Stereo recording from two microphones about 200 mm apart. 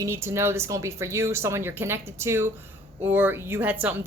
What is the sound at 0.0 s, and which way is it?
Speech, 15° right (ahead or behind).